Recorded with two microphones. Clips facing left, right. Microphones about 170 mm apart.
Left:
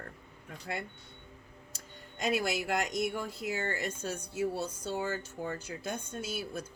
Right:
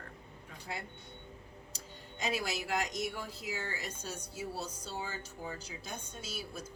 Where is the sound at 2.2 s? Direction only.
50° left (ahead or behind).